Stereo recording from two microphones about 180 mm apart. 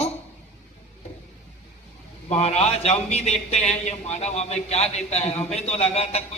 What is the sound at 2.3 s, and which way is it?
Speech, 35° left (ahead or behind).